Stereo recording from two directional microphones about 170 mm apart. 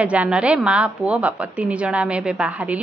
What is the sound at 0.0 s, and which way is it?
A woman's voice, 5° right (ahead or behind).